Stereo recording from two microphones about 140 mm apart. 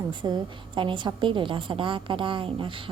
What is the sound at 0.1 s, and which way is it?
A woman's voice, 35° right (ahead or behind).